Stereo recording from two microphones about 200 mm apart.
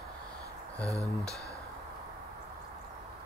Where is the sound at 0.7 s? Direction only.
15° right (ahead or behind).